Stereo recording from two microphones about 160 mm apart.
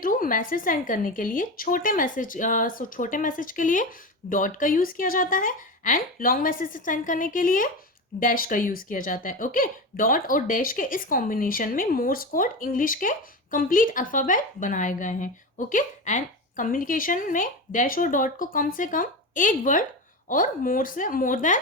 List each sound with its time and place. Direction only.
0.0 s speech: 60° left (ahead or behind)